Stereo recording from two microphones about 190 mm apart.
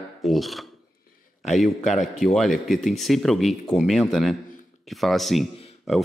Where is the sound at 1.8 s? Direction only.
40° left (ahead or behind).